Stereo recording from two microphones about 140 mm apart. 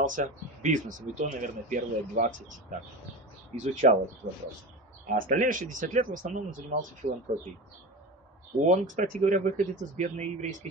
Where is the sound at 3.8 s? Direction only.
70° right (ahead or behind).